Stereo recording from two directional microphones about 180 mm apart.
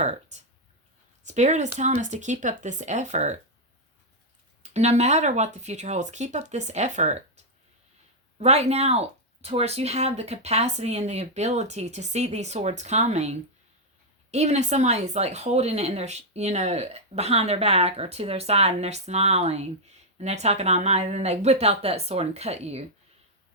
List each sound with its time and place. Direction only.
0.3 s a sound: 40° right (ahead or behind)
1.2 s speech: 40° right (ahead or behind)
4.6 s speech: 40° right (ahead or behind)
8.4 s speech: 35° right (ahead or behind)